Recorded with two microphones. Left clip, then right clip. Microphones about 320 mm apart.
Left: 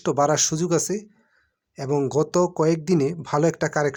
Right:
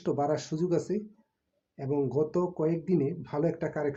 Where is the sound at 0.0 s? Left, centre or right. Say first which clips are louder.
Left 9 dB; left.